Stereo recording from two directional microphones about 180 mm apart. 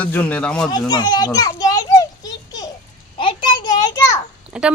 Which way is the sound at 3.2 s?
30° left (ahead or behind).